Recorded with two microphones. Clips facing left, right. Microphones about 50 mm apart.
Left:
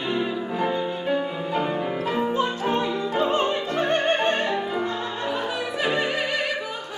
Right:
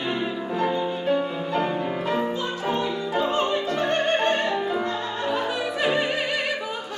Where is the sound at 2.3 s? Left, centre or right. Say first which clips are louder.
Left 3 dB; left.